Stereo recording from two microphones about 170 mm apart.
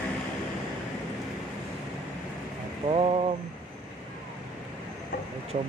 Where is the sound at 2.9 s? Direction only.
35° right (ahead or behind).